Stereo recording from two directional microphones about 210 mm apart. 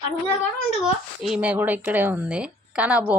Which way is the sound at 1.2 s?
5° right (ahead or behind).